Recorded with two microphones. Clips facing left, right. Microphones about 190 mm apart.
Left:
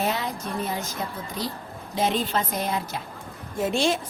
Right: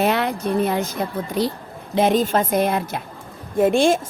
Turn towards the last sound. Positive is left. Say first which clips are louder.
# right 8 dB
turn(degrees=-55)  # may be behind; listen again after turning